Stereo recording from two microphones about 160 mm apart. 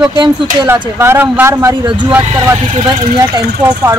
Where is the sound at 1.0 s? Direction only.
15° right (ahead or behind).